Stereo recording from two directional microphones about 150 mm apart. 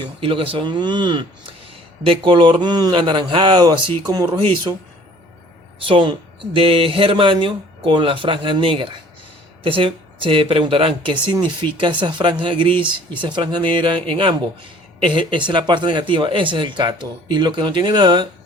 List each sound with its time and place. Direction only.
0.0 s speech: 35° right (ahead or behind)
4.3 s speech: 35° right (ahead or behind)
5.8 s speech: 35° right (ahead or behind)